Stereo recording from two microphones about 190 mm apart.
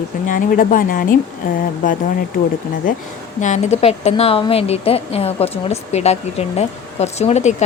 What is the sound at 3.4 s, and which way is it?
A woman's voice, 40° left (ahead or behind).